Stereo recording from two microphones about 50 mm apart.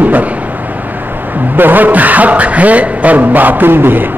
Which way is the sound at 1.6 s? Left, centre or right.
Right.